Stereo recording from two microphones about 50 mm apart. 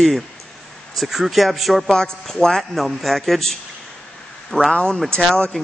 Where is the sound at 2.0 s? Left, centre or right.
Centre.